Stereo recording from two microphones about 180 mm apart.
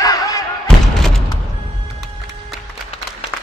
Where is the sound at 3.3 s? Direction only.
15° left (ahead or behind).